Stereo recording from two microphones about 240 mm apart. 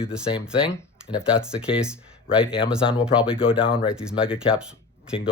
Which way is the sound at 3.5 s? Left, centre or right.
Left.